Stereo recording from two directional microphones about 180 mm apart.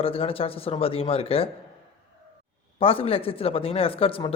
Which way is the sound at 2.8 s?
30° left (ahead or behind).